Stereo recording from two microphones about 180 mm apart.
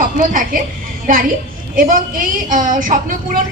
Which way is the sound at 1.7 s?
50° right (ahead or behind).